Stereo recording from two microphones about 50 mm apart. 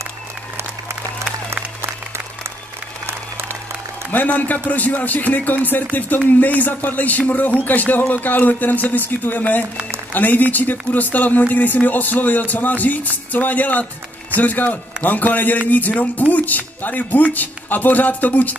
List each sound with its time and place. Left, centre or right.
1.5 s applause: right
4.1 s speech: left